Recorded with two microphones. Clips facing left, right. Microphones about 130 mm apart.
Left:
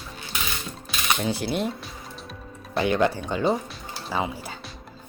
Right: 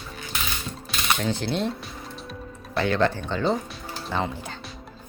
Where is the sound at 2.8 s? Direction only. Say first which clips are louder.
Left 1 dB; 15° left (ahead or behind).